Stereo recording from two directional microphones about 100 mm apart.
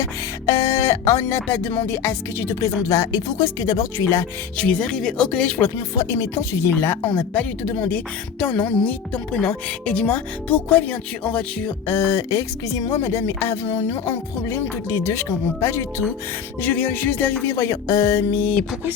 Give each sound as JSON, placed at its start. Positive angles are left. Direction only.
{"t": 0.0, "sound": "music", "side_deg": 35}
{"t": 1.5, "sound": "speech", "side_deg": 20}
{"t": 4.5, "sound": "a woman's voice", "side_deg": 10}
{"t": 5.7, "sound": "a woman's voice", "side_deg": 35}
{"t": 11.9, "sound": "speech", "side_deg": 35}
{"t": 17.6, "sound": "speech", "side_deg": 35}